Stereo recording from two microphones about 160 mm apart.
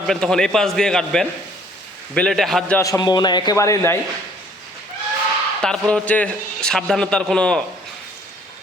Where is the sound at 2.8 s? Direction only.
25° left (ahead or behind).